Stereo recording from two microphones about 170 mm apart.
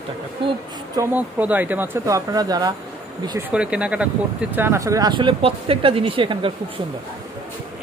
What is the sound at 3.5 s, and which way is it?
Speech, 5° right (ahead or behind).